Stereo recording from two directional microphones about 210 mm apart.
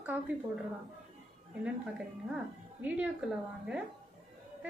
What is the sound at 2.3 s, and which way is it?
Speech, 5° right (ahead or behind).